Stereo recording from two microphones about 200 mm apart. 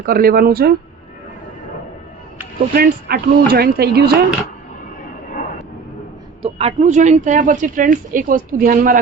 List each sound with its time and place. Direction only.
0.0 s speech: 45° right (ahead or behind)
2.7 s speech: 50° right (ahead or behind)
6.4 s speech: 30° right (ahead or behind); by 9.0 s 45° right (ahead or behind)